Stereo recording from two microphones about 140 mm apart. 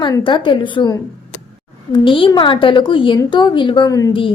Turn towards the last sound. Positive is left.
turn(degrees=25)  # may be behind; listen again after turning